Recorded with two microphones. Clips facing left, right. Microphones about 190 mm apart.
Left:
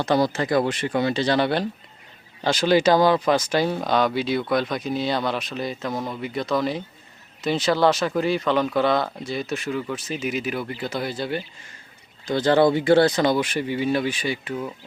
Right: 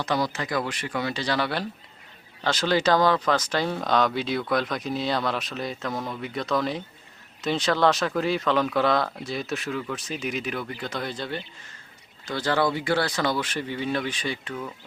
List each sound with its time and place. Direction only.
0.0 s speech: 30° left (ahead or behind)
2.4 s speech: 10° left (ahead or behind)
12.2 s speech: 20° left (ahead or behind)